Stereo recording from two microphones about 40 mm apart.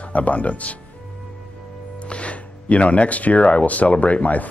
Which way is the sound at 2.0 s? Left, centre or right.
Left.